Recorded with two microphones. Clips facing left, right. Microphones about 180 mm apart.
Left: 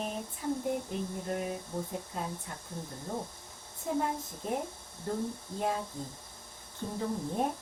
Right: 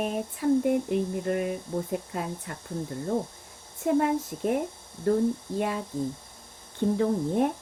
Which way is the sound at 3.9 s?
75° right (ahead or behind).